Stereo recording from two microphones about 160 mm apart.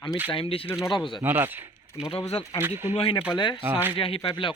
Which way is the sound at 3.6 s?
15° right (ahead or behind).